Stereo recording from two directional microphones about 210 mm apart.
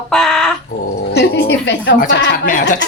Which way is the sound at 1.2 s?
55° left (ahead or behind).